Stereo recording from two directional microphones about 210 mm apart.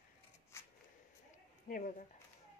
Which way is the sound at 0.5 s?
10° left (ahead or behind).